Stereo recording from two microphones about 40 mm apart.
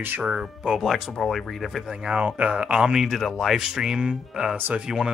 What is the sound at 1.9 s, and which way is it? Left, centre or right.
Speech, right.